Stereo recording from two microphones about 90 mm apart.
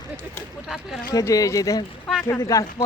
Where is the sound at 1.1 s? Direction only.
40° left (ahead or behind).